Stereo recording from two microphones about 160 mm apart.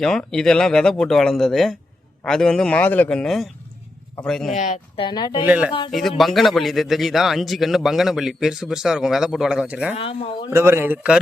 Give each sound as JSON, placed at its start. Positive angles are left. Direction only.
{"t": 0.0, "sound": "a man's voice", "side_deg": 5}
{"t": 4.5, "sound": "speech", "side_deg": 50}
{"t": 4.9, "sound": "speech", "side_deg": 30}
{"t": 5.5, "sound": "a man's voice", "side_deg": -5}
{"t": 9.9, "sound": "speech", "side_deg": 35}
{"t": 10.5, "sound": "a man's voice", "side_deg": -15}